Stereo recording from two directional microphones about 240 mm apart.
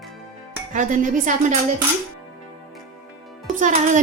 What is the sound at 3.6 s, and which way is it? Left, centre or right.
Speech, right.